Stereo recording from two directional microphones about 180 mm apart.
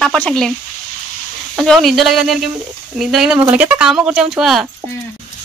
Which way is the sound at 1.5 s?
Centre (ahead or behind).